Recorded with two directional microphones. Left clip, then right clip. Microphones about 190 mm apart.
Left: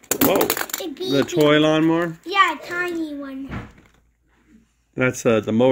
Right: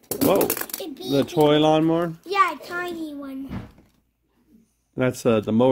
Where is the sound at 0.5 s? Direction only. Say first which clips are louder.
Left 6 dB; 10° right (ahead or behind).